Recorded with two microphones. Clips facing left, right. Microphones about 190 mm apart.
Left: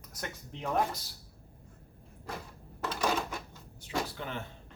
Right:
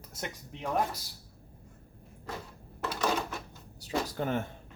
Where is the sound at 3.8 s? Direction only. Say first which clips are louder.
Right 3 dB; 40° right (ahead or behind).